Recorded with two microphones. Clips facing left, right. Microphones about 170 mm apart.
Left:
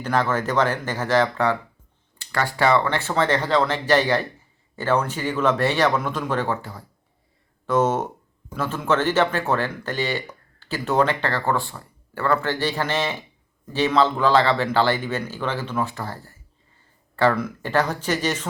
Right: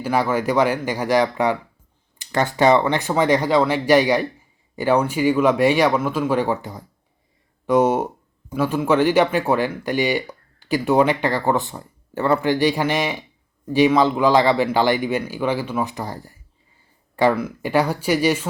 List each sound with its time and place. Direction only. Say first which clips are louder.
0.0 s speech: right 2 dB; 10° right (ahead or behind)